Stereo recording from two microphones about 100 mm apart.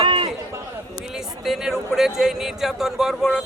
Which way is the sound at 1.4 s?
5° right (ahead or behind).